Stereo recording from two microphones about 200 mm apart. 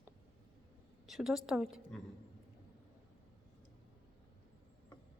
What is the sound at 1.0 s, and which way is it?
Speech, centre (ahead or behind).